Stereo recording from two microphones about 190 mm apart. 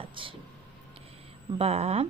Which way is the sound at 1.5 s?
30° right (ahead or behind).